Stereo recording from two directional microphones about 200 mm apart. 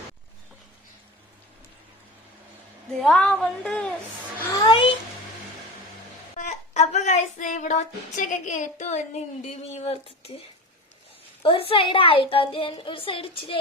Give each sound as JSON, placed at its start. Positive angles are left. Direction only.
{"t": 3.0, "sound": "a woman's voice", "side_deg": 5}
{"t": 4.6, "sound": "a sound", "side_deg": 25}
{"t": 6.3, "sound": "child singing", "side_deg": 35}
{"t": 11.4, "sound": "a woman's voice", "side_deg": 25}